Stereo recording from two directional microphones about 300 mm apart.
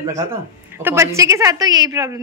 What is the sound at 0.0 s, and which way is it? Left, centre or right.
A woman's voice, centre.